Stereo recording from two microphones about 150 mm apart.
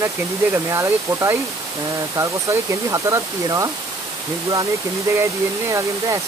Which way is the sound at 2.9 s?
20° right (ahead or behind).